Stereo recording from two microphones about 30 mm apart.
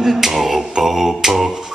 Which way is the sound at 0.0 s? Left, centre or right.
Centre.